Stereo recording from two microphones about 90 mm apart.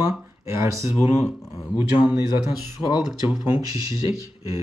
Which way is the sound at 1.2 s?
30° left (ahead or behind).